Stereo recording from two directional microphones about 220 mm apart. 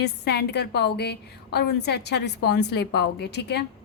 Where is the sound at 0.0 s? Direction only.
50° left (ahead or behind).